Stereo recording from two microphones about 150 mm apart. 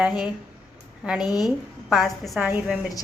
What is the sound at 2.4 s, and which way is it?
Speech, 10° right (ahead or behind).